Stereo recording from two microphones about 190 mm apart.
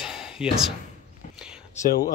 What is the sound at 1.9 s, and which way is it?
Speech, 50° left (ahead or behind).